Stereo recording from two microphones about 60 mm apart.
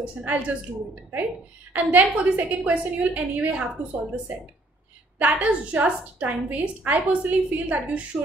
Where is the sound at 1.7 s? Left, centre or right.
Right.